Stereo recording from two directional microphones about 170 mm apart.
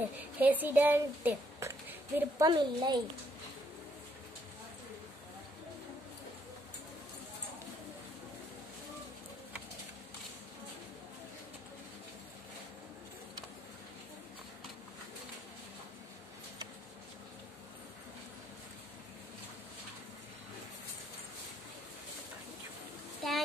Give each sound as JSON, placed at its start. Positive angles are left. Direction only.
{"t": 0.4, "sound": "a woman's voice", "side_deg": -10}
{"t": 2.4, "sound": "speech", "side_deg": -25}
{"t": 23.2, "sound": "a sound", "side_deg": 0}